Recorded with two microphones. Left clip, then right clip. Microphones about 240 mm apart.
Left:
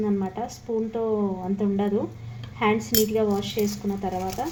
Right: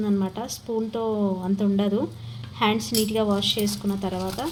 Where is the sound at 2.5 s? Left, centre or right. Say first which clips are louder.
Left 1 dB; right.